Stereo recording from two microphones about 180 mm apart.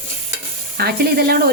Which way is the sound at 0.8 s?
60° right (ahead or behind).